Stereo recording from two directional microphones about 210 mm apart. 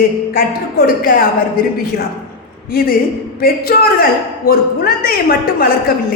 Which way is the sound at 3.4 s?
45° left (ahead or behind).